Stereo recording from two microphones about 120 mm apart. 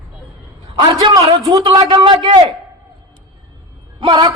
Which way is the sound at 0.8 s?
40° right (ahead or behind).